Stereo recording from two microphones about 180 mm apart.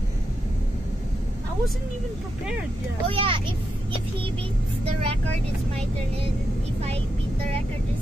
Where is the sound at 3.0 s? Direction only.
30° right (ahead or behind).